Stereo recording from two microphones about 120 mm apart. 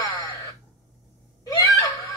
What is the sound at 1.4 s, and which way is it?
Screaming, 30° left (ahead or behind).